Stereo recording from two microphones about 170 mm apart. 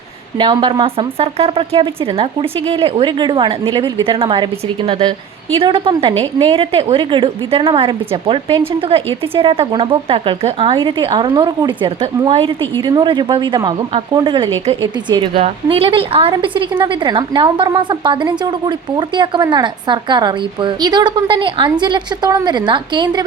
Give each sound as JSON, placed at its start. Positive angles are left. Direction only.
{"t": 0.3, "sound": "a woman's voice", "side_deg": -30}